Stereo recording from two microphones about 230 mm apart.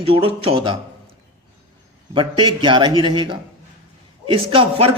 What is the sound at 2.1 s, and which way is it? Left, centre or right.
Speech, right.